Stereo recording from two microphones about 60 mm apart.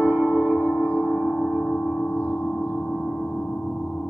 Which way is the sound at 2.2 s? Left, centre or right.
Left.